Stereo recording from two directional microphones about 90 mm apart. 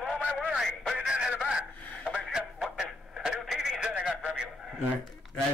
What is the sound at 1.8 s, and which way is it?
Radio, 15° left (ahead or behind).